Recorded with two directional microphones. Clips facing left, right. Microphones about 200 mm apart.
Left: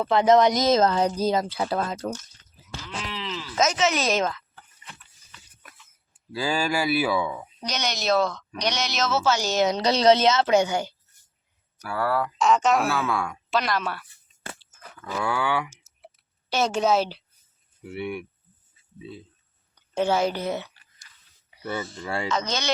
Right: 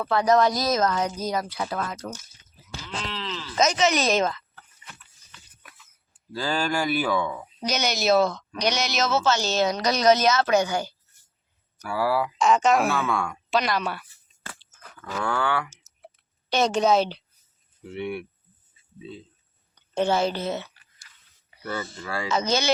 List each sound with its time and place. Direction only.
0.0 s speech: 20° left (ahead or behind)
2.2 s a sound: 5° right (ahead or behind)
3.0 s speech: 10° left (ahead or behind)
6.3 s speech: 10° left (ahead or behind)
7.6 s speech: 5° right (ahead or behind); by 10.9 s 20° left (ahead or behind)
11.8 s speech: centre (ahead or behind)
15.1 s speech: 10° left (ahead or behind)
19.7 s whispering: 10° left (ahead or behind)
21.5 s a sound: 10° left (ahead or behind)
22.0 s speech: 25° left (ahead or behind)
22.3 s speech: 5° right (ahead or behind)